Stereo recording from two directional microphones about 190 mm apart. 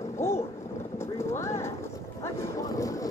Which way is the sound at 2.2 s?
15° left (ahead or behind).